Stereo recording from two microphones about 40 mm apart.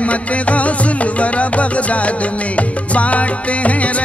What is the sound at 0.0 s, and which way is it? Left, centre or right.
Music, left.